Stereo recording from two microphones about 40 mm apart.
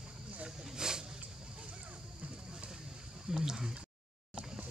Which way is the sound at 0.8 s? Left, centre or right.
Centre.